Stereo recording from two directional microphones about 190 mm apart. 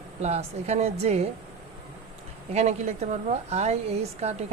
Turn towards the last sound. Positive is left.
turn(degrees=-35)  # may be behind; listen again after turning